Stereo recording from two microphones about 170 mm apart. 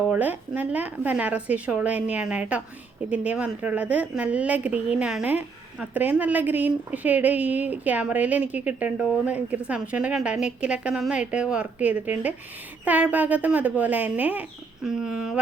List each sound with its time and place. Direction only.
0.1 s a woman's voice: 10° right (ahead or behind)